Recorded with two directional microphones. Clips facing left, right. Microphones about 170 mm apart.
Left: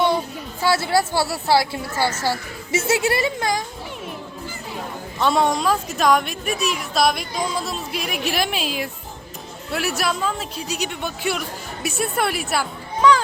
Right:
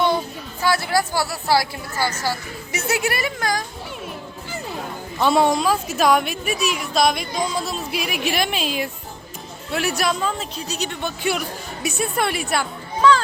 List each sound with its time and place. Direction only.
0.6 s a woman's voice: 25° left (ahead or behind)
5.2 s a woman's voice: 5° right (ahead or behind)
13.0 s a child's voice: 15° left (ahead or behind)